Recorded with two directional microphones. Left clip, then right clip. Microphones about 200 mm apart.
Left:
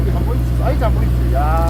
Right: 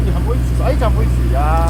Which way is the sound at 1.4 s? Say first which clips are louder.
Right 1 dB; 40° right (ahead or behind).